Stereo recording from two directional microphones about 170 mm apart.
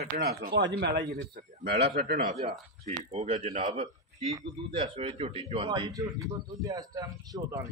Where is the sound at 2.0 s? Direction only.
70° right (ahead or behind).